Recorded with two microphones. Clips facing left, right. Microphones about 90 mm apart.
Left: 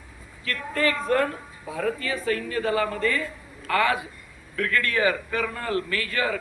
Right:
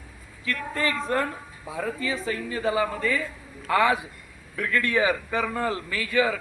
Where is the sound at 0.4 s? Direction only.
20° right (ahead or behind).